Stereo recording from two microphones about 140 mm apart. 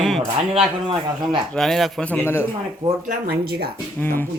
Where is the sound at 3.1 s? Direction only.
90° right.